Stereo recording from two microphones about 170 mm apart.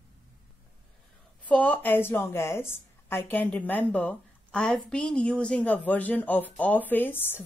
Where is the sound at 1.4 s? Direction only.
10° left (ahead or behind).